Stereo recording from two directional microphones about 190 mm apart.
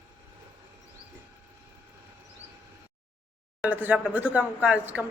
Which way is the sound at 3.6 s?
10° right (ahead or behind).